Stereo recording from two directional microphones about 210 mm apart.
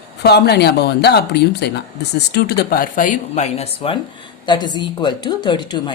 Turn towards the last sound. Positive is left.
turn(degrees=20)  # may be behind; listen again after turning